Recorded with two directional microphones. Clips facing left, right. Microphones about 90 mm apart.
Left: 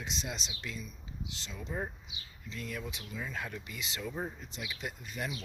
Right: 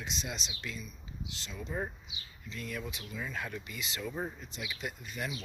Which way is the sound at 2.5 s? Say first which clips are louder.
Right 1 dB; 25° left (ahead or behind).